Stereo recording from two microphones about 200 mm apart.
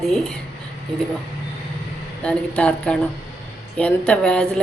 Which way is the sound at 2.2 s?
5° left (ahead or behind).